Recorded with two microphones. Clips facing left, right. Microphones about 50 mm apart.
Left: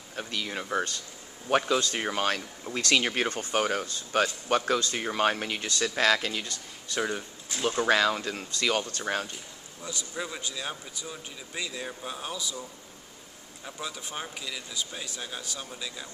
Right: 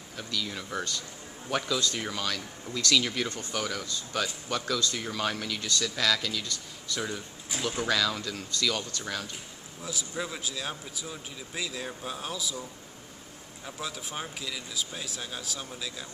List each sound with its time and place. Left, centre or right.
0.1 s speech: left
9.8 s speech: centre
13.7 s speech: centre